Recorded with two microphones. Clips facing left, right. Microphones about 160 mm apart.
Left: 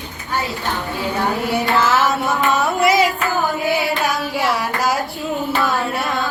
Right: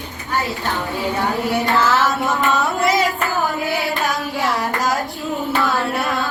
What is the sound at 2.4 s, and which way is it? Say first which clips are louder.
Carnatic music: left 3 dB; 20° left (ahead or behind).